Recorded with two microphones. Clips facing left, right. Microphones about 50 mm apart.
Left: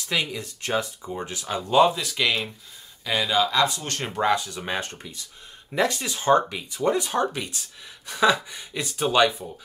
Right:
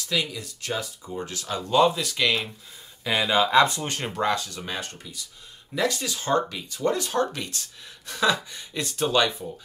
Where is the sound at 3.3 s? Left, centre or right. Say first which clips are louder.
Right 3 dB; right.